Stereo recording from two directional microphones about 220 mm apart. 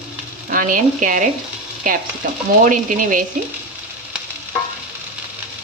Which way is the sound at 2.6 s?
40° right (ahead or behind).